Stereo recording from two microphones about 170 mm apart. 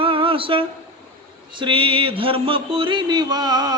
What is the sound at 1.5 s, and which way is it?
Mantra, 30° right (ahead or behind).